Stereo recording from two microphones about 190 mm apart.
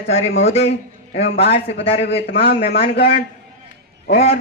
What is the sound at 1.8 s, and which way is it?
Speech, 30° left (ahead or behind).